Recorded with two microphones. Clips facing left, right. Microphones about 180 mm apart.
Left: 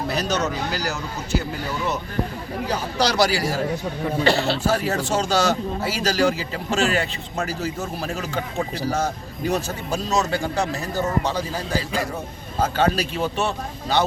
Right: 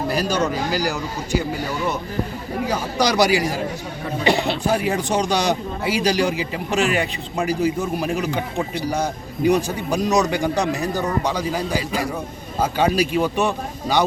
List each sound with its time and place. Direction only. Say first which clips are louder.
0.1 s a man's voice: right 3 dB; 10° right (ahead or behind)
2.6 s a man's voice: right 2 dB; 10° right (ahead or behind)